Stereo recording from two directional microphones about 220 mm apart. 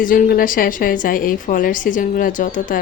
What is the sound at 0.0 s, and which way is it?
A woman's voice, 40° left (ahead or behind).